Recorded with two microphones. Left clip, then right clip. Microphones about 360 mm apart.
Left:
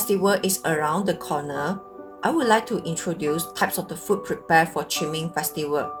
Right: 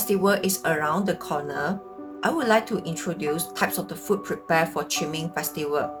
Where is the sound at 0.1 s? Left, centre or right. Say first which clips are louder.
Left 1 dB; centre.